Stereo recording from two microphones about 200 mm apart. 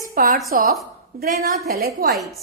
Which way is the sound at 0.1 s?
45° right (ahead or behind).